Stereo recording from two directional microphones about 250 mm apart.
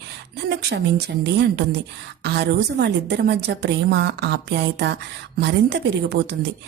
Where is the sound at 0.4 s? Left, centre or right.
Right.